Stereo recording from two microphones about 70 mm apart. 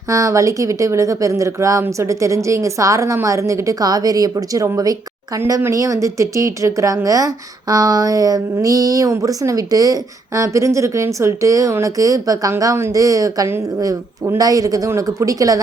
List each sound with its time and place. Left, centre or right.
0.1 s speech: right
5.7 s speech: right
14.8 s speech: right